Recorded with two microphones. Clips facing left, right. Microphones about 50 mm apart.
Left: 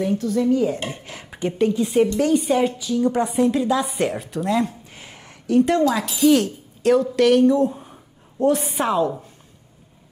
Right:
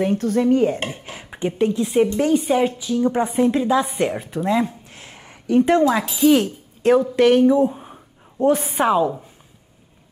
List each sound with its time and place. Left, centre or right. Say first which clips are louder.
0.0 s dishes: right 2 dB; right
1.1 s a sound: even; centre
1.7 s a woman's voice: even; centre
2.0 s a woman's voice: even; centre
3.9 s speech: right 1 dB; centre
4.9 s a sound: even; centre
5.7 s a woman's voice: right 2 dB; right
6.1 s speech: left 1 dB; centre
8.5 s speech: right 3 dB; centre